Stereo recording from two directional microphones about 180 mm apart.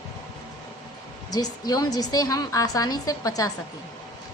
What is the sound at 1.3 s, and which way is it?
A woman's voice, 20° left (ahead or behind).